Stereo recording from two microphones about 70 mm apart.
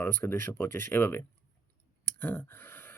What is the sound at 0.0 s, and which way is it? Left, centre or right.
Speech, left.